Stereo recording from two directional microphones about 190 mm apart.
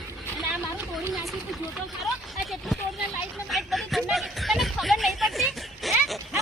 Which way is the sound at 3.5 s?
Centre (ahead or behind).